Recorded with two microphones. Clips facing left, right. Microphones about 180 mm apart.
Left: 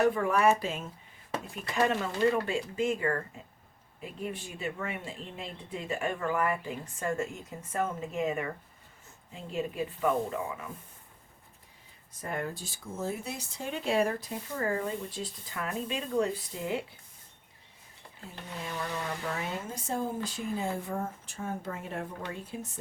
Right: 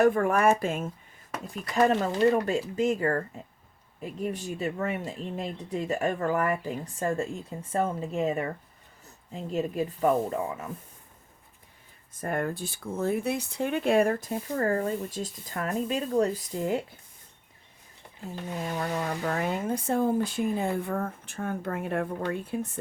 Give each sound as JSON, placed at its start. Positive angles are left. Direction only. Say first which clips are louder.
{"t": 0.0, "sound": "speech", "louder": "right 3 dB", "side_deg": -50}
{"t": 1.7, "sound": "a woman's voice", "louder": "right 5 dB", "side_deg": -35}
{"t": 12.2, "sound": "speech", "louder": "right 6 dB", "side_deg": -55}
{"t": 18.6, "sound": "speech", "louder": "right 5 dB", "side_deg": -45}